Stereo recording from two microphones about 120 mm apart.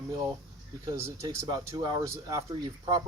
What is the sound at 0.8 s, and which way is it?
Speech, 25° right (ahead or behind).